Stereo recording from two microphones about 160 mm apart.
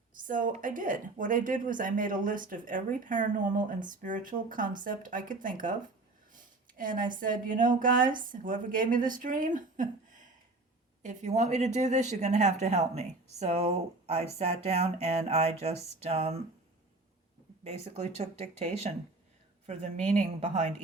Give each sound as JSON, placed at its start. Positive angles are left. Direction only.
{"t": 0.1, "sound": "a woman's voice", "side_deg": -55}
{"t": 17.6, "sound": "speech", "side_deg": -40}